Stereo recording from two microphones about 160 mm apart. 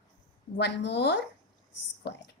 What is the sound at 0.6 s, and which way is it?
A woman's voice, 90° left.